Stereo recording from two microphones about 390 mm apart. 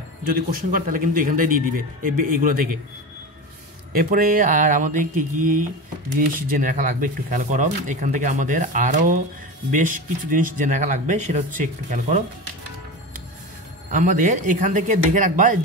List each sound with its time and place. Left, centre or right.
0.3 s speech: right
3.9 s speech: right
13.9 s speech: centre